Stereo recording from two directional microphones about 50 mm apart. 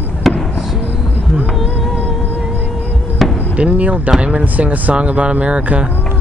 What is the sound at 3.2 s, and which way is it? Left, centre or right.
Chop, centre.